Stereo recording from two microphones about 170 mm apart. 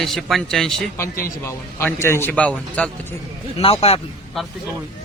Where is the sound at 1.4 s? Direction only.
15° left (ahead or behind).